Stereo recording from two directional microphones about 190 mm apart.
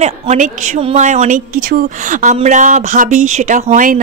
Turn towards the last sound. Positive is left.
turn(degrees=-45)  # may be behind; listen again after turning